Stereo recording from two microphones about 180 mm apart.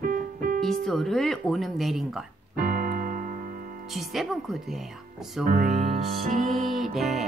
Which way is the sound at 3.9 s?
Centre (ahead or behind).